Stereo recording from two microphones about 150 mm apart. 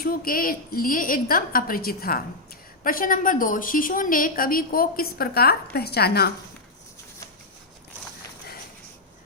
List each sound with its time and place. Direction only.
0.0 s a woman's voice: 75° left (ahead or behind)
2.8 s a woman's voice: 65° left (ahead or behind); by 6.3 s 90° left